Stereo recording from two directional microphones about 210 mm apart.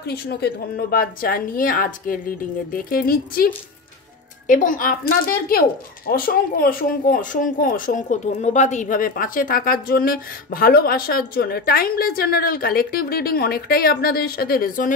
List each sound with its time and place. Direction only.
0.0 s a woman's voice: 50° left (ahead or behind)